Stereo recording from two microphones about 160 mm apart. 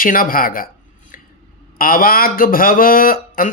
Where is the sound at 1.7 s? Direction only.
65° left (ahead or behind).